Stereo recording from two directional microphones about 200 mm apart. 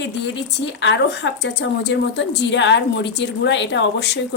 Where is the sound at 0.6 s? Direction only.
65° left (ahead or behind).